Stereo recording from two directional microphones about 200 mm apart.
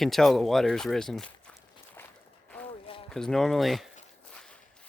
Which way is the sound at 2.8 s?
25° left (ahead or behind).